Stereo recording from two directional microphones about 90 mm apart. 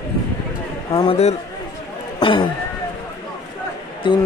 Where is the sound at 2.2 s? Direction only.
65° left (ahead or behind).